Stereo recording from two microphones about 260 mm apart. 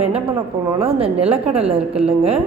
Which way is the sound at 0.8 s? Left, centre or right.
Right.